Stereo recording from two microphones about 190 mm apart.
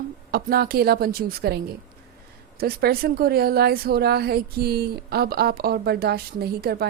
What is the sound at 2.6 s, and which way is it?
A woman's voice, 55° right (ahead or behind).